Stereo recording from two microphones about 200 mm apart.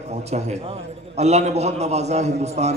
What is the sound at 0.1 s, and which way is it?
A man's voice, 35° right (ahead or behind).